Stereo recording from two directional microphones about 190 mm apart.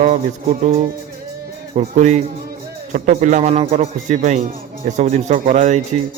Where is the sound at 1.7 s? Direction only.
35° right (ahead or behind).